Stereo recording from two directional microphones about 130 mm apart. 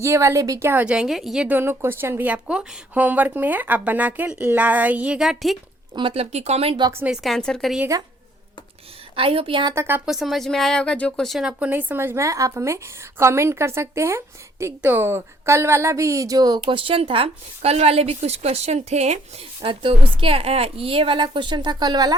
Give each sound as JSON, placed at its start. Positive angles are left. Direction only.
{"t": 0.0, "sound": "a woman's voice", "side_deg": -20}
{"t": 5.9, "sound": "a woman's voice", "side_deg": -40}
{"t": 6.9, "sound": "a woman's voice", "side_deg": -10}
{"t": 7.2, "sound": "a woman's voice", "side_deg": 5}
{"t": 9.1, "sound": "a woman's voice", "side_deg": -45}
{"t": 9.7, "sound": "a woman's voice", "side_deg": -15}
{"t": 10.1, "sound": "a woman's voice", "side_deg": 0}
{"t": 19.6, "sound": "a woman's voice", "side_deg": -45}